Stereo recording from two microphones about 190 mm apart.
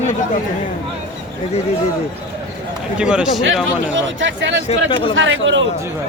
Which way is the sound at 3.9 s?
75° right (ahead or behind).